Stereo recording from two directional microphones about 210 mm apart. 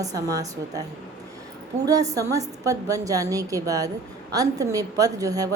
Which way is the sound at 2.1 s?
15° right (ahead or behind).